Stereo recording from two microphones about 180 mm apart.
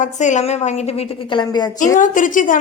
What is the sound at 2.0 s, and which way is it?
Speech, 45° left (ahead or behind).